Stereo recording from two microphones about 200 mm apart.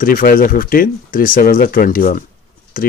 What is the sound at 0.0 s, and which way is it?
Speech, 45° left (ahead or behind).